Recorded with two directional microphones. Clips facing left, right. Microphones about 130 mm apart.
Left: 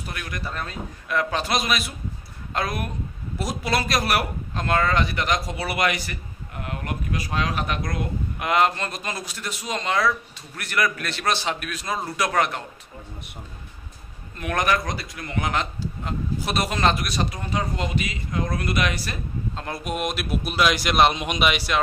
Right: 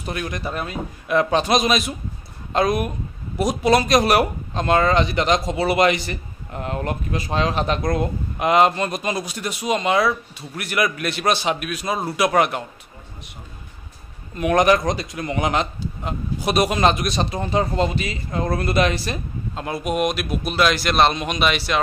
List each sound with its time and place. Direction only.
0.0 s speech: 25° right (ahead or behind)
14.4 s speech: 20° right (ahead or behind)
19.5 s a man's voice: 5° right (ahead or behind); by 21.7 s 10° left (ahead or behind)